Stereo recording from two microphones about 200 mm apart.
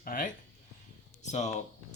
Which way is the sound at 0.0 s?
45° left (ahead or behind).